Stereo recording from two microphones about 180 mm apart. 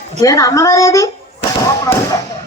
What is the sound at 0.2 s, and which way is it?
Speech, 20° left (ahead or behind).